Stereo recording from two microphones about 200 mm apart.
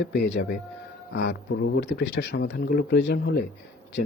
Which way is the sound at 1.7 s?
60° left (ahead or behind).